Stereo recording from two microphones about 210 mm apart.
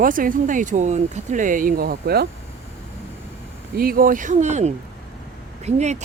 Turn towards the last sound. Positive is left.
turn(degrees=-35)  # may be behind; listen again after turning